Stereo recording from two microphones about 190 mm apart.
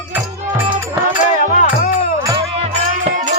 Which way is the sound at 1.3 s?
45° left (ahead or behind).